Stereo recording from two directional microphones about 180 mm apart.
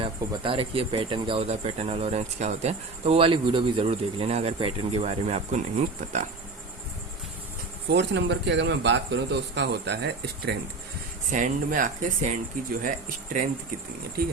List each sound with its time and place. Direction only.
0.0 s speech: 30° right (ahead or behind)
7.9 s a man's voice: 75° right (ahead or behind)
11.3 s speech: 45° right (ahead or behind)